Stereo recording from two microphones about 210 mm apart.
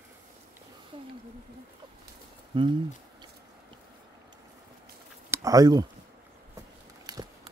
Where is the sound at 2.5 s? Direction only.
25° right (ahead or behind).